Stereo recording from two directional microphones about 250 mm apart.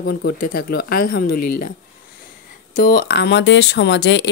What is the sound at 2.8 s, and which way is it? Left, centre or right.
Speech, left.